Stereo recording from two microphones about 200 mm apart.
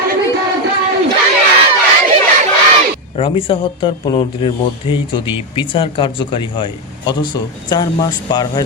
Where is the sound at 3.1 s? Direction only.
30° left (ahead or behind).